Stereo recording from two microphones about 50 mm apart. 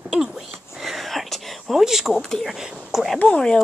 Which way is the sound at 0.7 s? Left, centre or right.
Centre.